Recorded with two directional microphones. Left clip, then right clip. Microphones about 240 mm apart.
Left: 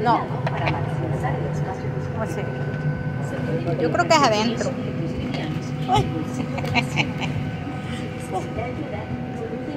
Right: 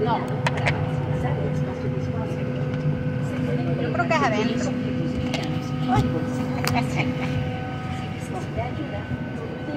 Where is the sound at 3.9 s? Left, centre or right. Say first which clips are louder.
Left 5 dB; left.